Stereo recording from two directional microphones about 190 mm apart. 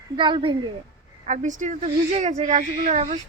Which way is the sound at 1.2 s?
40° right (ahead or behind).